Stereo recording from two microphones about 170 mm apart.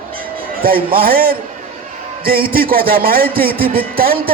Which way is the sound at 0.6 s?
60° right (ahead or behind).